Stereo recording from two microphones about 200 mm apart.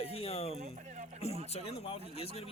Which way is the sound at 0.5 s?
35° right (ahead or behind).